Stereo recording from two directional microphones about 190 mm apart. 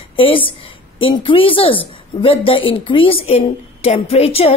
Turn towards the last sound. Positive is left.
turn(degrees=30)  # may be behind; listen again after turning